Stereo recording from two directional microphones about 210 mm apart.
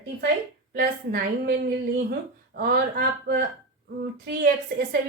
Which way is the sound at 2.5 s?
50° right (ahead or behind).